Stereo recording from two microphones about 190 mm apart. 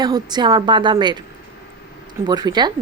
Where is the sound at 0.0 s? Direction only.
20° right (ahead or behind).